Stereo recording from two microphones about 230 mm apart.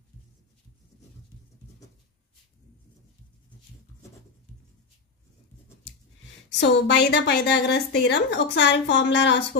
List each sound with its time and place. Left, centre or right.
6.5 s a woman's voice: left